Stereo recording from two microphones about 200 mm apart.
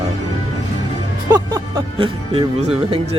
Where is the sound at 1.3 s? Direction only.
20° right (ahead or behind).